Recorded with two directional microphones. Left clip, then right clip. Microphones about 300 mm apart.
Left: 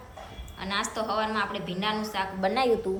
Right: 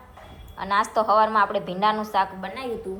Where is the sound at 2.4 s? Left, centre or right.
Centre.